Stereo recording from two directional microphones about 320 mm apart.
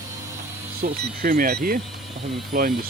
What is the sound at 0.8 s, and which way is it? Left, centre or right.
Speech, right.